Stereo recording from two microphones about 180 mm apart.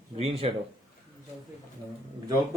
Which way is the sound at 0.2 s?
30° right (ahead or behind).